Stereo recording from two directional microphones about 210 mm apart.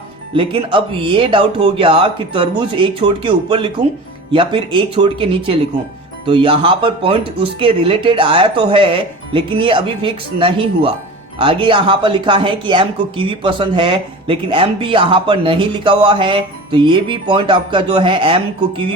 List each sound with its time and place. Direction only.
0.3 s speech: 25° right (ahead or behind)